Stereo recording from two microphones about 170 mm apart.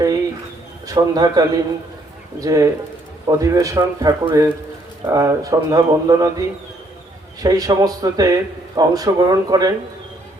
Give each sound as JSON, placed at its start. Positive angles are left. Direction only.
{"t": 0.9, "sound": "speech", "side_deg": -25}
{"t": 7.4, "sound": "speech", "side_deg": -20}